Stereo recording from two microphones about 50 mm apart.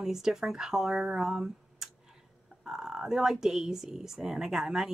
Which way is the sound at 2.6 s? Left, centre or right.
Centre.